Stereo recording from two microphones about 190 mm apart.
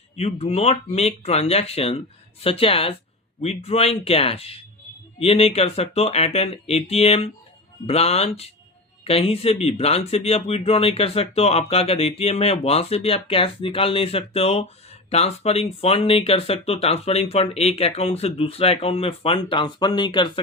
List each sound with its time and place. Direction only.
0.2 s speech: 30° left (ahead or behind)